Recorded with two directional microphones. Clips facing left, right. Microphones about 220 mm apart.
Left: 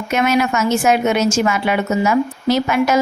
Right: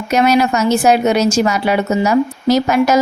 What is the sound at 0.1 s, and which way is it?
A woman's voice, 35° right (ahead or behind).